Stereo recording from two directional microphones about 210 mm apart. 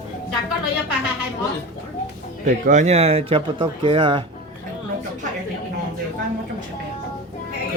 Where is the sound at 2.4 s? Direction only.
35° right (ahead or behind).